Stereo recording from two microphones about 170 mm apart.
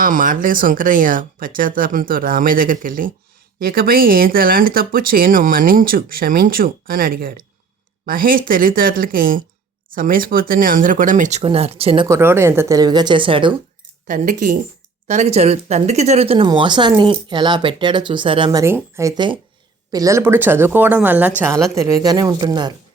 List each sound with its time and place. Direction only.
0.0 s speech: 50° right (ahead or behind); by 12.0 s 35° right (ahead or behind)
12.0 s speech: 15° right (ahead or behind)
14.1 s speech: 50° right (ahead or behind); by 18.6 s 30° right (ahead or behind)
18.6 s speech: 15° right (ahead or behind)